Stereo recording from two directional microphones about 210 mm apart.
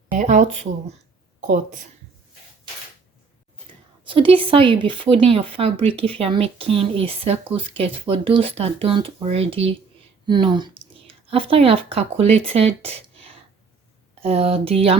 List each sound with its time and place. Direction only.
0.1 s speech: 35° right (ahead or behind)
4.0 s speech: 25° right (ahead or behind)